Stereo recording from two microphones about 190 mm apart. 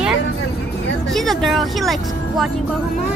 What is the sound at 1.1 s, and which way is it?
Speech, centre (ahead or behind).